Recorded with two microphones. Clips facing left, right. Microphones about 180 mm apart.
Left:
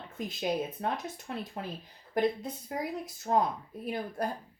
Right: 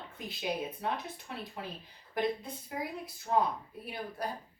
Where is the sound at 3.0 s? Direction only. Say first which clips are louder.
Left 1 dB; 45° left (ahead or behind).